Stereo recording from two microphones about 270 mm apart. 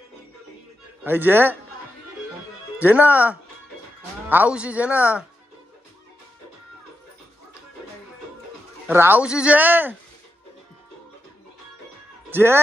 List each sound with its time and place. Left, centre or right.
1.0 s speech: centre
2.8 s speech: centre
8.8 s speech: centre
12.3 s speech: centre